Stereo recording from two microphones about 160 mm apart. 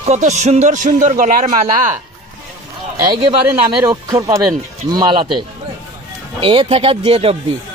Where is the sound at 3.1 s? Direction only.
30° right (ahead or behind).